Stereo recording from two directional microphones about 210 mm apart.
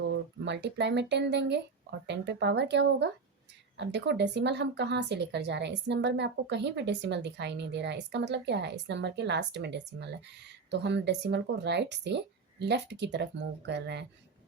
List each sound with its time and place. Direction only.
0.1 s a woman's voice: 55° right (ahead or behind)